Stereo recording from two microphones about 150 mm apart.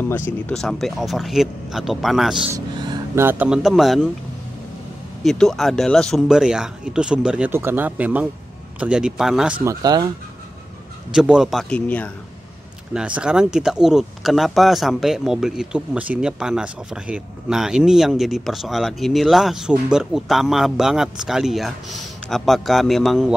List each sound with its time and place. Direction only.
0.5 s speech: 5° left (ahead or behind)
2.5 s speech: 20° right (ahead or behind); by 4.1 s centre (ahead or behind)
5.2 s speech: centre (ahead or behind)
9.7 s speech: 25° right (ahead or behind)
11.1 s speech: 5° right (ahead or behind)
11.7 s speech: 10° left (ahead or behind)
12.9 s speech: 5° right (ahead or behind)